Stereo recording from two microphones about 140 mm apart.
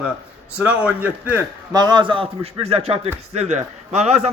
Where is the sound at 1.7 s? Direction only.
30° right (ahead or behind); by 4.3 s 50° right (ahead or behind).